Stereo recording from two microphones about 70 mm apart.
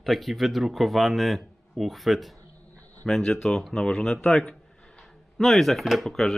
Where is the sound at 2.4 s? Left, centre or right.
Right.